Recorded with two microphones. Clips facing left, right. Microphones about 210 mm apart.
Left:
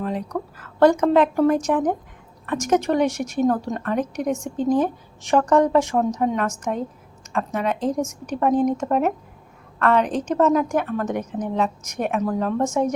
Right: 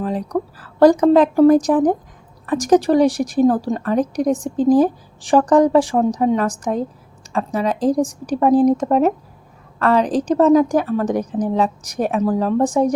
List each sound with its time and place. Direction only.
0.0 s a woman's voice: 35° right (ahead or behind)